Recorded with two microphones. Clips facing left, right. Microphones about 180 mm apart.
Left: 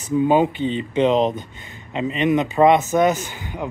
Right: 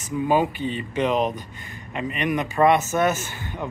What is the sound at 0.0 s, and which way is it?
Speech, 25° left (ahead or behind).